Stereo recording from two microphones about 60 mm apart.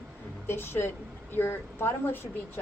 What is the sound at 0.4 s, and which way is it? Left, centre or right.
A woman's voice, left.